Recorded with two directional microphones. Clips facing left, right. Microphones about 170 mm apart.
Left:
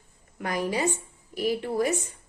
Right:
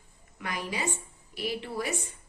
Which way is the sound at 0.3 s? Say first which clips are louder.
Left 7 dB; 45° left (ahead or behind).